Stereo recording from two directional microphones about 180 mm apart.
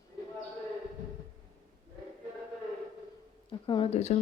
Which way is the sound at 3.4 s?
30° left (ahead or behind).